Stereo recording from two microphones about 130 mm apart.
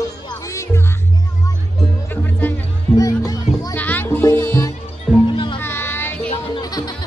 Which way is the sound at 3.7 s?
15° left (ahead or behind).